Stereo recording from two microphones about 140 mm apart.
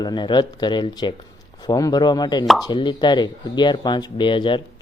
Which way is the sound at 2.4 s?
Centre (ahead or behind).